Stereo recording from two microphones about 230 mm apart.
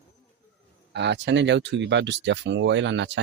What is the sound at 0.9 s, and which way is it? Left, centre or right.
Speech, right.